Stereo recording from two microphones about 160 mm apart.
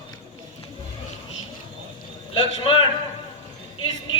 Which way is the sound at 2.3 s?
35° left (ahead or behind).